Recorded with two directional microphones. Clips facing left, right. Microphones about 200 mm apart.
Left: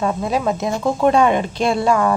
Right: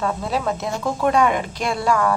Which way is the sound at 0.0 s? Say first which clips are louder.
Left 4 dB; 20° left (ahead or behind).